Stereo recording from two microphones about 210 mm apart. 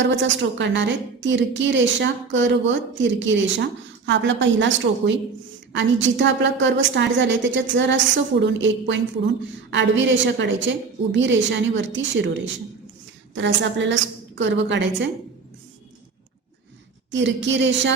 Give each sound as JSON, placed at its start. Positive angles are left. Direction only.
{"t": 0.0, "sound": "a woman's voice", "side_deg": -60}
{"t": 17.1, "sound": "a woman's voice", "side_deg": -60}